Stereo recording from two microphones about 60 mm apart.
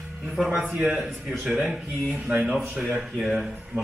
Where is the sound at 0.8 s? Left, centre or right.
Centre.